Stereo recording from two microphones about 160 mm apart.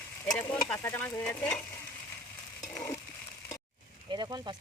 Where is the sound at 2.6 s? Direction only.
20° left (ahead or behind).